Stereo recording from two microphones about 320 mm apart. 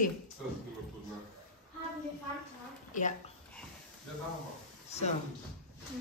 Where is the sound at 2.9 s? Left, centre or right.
Left.